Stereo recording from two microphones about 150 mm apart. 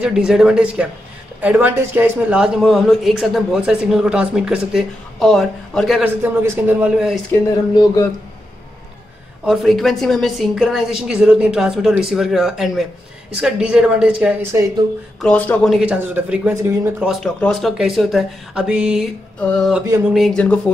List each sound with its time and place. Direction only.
0.0 s speech: 5° right (ahead or behind)
6.0 s speech: 15° right (ahead or behind)
7.5 s a sound: 25° left (ahead or behind)
9.5 s speech: centre (ahead or behind)
15.1 s speech: 5° left (ahead or behind)
15.7 s speech: 10° right (ahead or behind)
17.1 s speech: 5° left (ahead or behind)
19.4 s speech: 5° left (ahead or behind)